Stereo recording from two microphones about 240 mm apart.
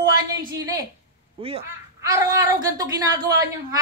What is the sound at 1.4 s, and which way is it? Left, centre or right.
A woman's voice, right.